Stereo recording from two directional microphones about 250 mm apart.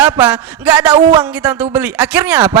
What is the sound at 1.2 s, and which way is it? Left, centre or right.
Speech, centre.